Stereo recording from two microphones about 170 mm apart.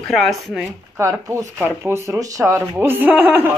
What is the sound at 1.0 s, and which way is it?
Speech, 15° right (ahead or behind).